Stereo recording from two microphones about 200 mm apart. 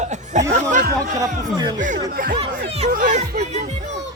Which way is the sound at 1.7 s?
40° right (ahead or behind).